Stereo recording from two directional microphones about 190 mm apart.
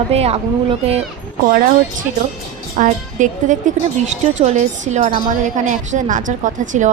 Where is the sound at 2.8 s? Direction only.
40° right (ahead or behind).